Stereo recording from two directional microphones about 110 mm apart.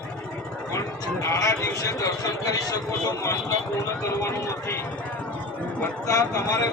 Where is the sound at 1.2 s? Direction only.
30° left (ahead or behind).